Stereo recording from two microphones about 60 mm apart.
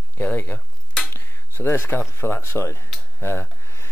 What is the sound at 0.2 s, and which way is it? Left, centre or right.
Speech, left.